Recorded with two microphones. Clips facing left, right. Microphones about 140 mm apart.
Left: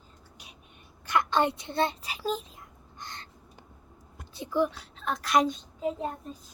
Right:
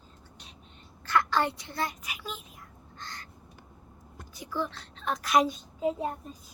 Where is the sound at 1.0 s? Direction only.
20° left (ahead or behind); by 2.4 s 35° left (ahead or behind).